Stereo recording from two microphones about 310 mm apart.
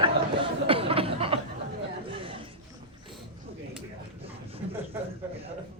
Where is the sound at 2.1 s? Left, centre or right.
Centre.